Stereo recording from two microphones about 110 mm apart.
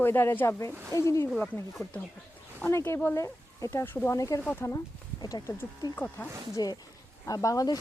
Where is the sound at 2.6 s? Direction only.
25° left (ahead or behind).